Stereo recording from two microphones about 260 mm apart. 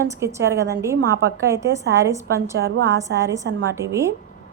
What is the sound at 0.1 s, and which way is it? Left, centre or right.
Speech, centre.